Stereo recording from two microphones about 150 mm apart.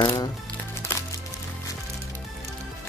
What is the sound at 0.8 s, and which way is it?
Music, 15° left (ahead or behind).